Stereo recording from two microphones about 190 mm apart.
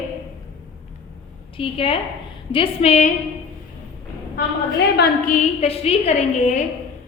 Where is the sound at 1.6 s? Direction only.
30° left (ahead or behind).